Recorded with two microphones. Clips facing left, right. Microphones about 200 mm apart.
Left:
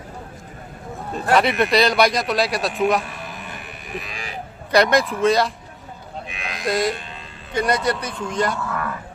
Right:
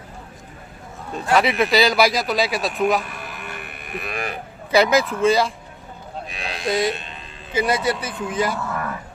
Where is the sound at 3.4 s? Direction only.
60° right (ahead or behind).